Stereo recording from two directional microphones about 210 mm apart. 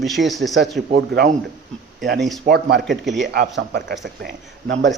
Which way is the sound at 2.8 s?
Centre (ahead or behind).